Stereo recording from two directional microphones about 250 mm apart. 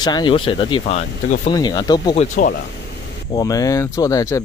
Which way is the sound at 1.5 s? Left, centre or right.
Centre.